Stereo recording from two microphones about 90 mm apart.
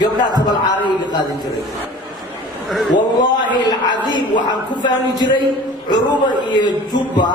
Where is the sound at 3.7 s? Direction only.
50° left (ahead or behind).